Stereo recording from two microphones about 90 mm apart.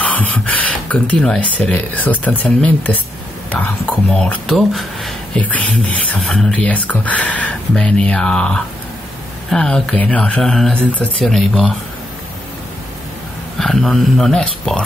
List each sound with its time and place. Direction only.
0.0 s a sound: 15° left (ahead or behind)
1.4 s speech: 15° left (ahead or behind)
5.4 s speech: 15° left (ahead or behind)
6.1 s speech: 5° left (ahead or behind)
6.5 s speech: 15° left (ahead or behind)
13.6 s speech: 5° left (ahead or behind)